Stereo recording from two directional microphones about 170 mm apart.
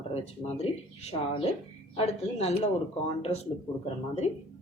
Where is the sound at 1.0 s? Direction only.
40° left (ahead or behind).